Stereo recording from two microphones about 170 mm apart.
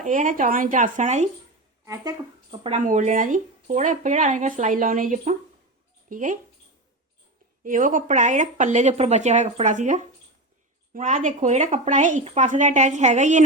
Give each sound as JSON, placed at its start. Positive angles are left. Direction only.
{"t": 0.0, "sound": "speech", "side_deg": -50}
{"t": 1.8, "sound": "speech", "side_deg": -20}
{"t": 2.5, "sound": "speech", "side_deg": -35}
{"t": 2.8, "sound": "speech", "side_deg": -45}
{"t": 7.6, "sound": "speech", "side_deg": -50}